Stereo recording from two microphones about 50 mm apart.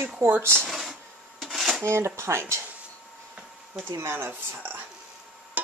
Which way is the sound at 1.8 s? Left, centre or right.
Right.